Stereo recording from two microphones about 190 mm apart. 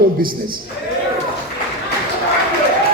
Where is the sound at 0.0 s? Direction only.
50° right (ahead or behind).